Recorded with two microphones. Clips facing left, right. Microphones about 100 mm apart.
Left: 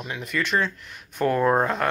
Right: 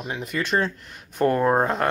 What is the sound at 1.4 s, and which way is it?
Speech, 20° right (ahead or behind).